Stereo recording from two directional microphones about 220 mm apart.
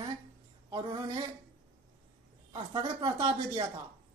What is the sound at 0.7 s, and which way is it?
Speech, 20° right (ahead or behind).